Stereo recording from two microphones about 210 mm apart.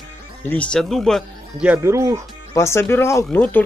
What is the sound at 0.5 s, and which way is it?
Speech, 5° left (ahead or behind).